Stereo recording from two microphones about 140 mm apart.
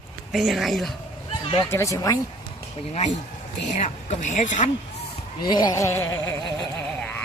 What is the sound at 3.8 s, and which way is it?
Speech, 60° left (ahead or behind).